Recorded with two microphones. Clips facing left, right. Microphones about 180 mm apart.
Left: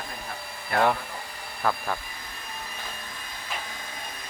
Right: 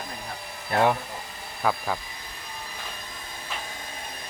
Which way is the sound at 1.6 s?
5° right (ahead or behind).